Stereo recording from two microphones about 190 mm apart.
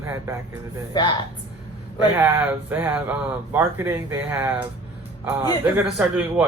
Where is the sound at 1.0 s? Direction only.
20° left (ahead or behind).